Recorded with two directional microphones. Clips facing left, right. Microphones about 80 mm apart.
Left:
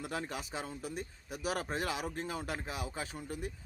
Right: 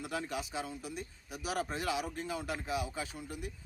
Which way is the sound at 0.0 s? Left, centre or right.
Left.